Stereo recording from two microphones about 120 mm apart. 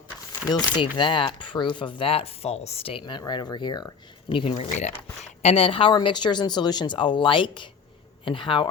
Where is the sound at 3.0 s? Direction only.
35° left (ahead or behind).